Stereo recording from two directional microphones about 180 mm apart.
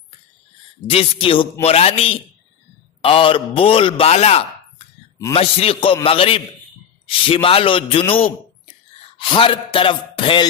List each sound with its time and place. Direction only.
0.8 s a man's voice: 30° left (ahead or behind)